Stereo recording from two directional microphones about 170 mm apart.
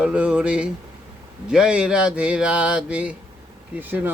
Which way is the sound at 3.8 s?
10° right (ahead or behind).